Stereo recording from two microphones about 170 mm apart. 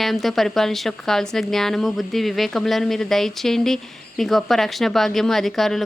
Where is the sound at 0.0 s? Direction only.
Centre (ahead or behind).